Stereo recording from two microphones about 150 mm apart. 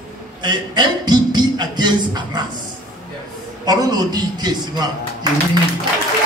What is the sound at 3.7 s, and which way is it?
Speech, 25° right (ahead or behind).